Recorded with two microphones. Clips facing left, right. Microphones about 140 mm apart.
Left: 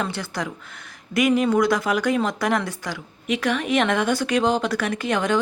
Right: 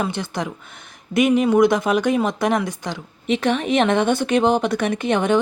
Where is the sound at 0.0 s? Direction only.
20° right (ahead or behind).